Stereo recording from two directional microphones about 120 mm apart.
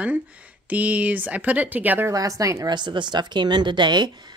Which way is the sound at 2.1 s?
30° right (ahead or behind).